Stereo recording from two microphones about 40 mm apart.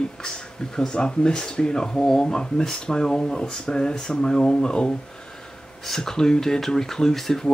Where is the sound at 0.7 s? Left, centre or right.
Centre.